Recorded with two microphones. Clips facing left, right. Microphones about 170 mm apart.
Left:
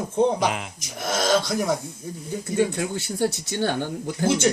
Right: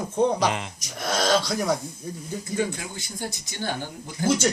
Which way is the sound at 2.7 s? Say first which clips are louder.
Left 8 dB; 65° left (ahead or behind).